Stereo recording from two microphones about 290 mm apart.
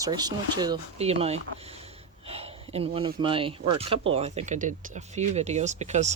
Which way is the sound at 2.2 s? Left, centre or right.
Right.